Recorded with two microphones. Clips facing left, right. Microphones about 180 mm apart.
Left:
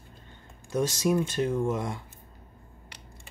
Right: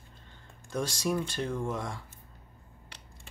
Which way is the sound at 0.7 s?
10° left (ahead or behind).